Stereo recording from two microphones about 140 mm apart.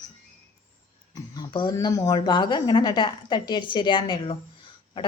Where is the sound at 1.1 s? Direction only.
30° left (ahead or behind).